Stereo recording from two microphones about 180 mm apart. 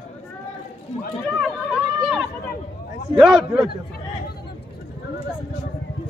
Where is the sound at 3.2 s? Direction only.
5° right (ahead or behind).